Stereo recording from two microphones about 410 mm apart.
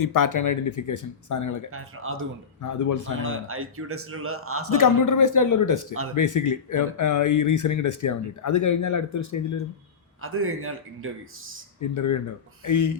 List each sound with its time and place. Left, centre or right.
0.0 s speech: left
1.7 s speech: right
2.6 s speech: left
3.2 s a man's voice: right
4.7 s speech: left
10.2 s a man's voice: right
11.8 s speech: left